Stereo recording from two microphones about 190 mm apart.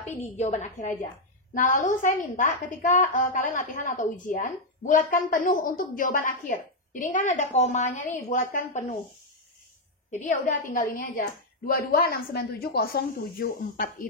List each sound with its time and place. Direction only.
0.4 s a woman's voice: 35° left (ahead or behind)
10.2 s a woman's voice: 40° left (ahead or behind)